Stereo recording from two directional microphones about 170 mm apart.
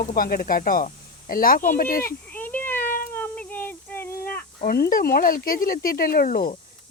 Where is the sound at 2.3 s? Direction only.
10° left (ahead or behind).